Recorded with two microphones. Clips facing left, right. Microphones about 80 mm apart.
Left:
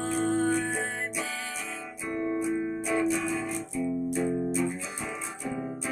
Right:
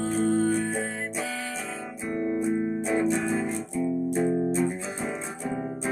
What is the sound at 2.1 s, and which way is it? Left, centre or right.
Music, right.